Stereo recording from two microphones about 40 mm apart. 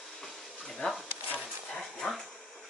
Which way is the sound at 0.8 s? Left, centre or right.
Left.